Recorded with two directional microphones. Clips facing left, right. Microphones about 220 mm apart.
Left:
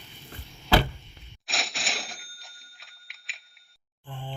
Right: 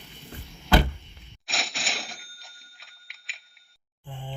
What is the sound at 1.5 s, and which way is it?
Cash register, centre (ahead or behind).